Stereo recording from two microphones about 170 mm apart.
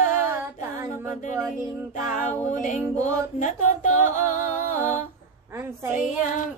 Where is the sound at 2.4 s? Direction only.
45° left (ahead or behind).